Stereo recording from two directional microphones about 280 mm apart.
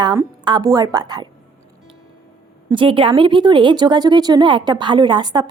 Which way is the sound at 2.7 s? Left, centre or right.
Centre.